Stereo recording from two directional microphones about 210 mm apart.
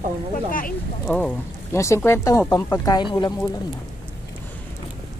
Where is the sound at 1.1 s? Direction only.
5° left (ahead or behind); by 3.3 s 20° left (ahead or behind).